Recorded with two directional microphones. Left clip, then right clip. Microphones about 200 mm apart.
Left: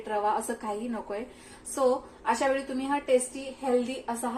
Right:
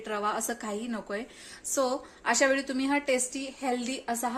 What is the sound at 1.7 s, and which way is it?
Speech, 55° right (ahead or behind).